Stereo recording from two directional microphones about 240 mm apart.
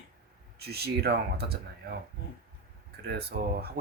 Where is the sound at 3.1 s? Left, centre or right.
Right.